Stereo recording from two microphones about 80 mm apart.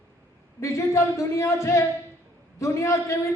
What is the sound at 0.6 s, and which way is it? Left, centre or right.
Speech, left.